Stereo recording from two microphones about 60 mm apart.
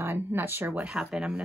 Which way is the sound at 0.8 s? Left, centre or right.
Centre.